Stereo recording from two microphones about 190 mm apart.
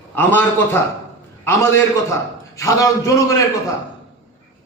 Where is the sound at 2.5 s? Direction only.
15° left (ahead or behind).